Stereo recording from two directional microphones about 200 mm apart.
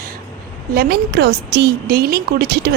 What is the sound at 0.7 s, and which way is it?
A woman's voice, 50° right (ahead or behind).